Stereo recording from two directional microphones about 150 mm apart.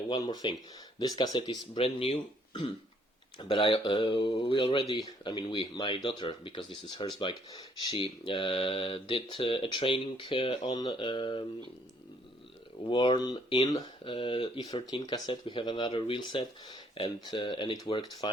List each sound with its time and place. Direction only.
0.2 s speech: 25° left (ahead or behind)
12.8 s speech: 30° left (ahead or behind)